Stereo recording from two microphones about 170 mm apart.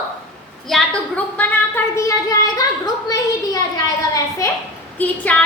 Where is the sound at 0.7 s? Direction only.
10° left (ahead or behind).